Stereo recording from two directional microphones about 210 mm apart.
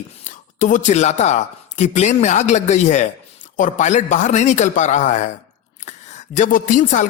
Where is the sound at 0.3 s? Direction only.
35° left (ahead or behind).